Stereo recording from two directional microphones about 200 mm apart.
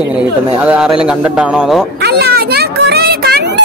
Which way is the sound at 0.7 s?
5° right (ahead or behind).